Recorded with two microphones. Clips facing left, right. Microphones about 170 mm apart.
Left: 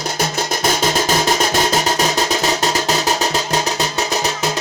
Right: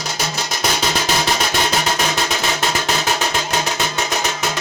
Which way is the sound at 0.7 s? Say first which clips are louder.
Left 3 dB; 45° left (ahead or behind).